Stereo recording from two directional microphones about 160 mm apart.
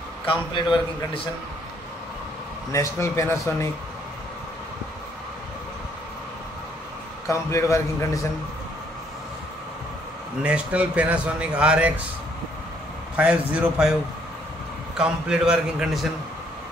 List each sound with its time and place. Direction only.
0.2 s a man's voice: 30° left (ahead or behind)
2.7 s speech: 20° left (ahead or behind)
7.2 s a man's voice: 20° left (ahead or behind)
10.4 s a man's voice: 10° right (ahead or behind)
13.1 s a man's voice: 10° right (ahead or behind)
15.0 s a man's voice: 5° right (ahead or behind)